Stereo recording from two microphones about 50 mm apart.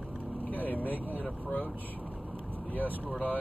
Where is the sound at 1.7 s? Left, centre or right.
Left.